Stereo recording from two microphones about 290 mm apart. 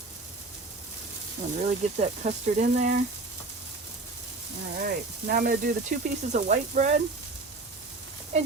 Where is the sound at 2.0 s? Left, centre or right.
Right.